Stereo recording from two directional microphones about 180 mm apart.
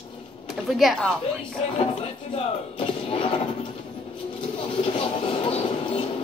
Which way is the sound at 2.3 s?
30° left (ahead or behind).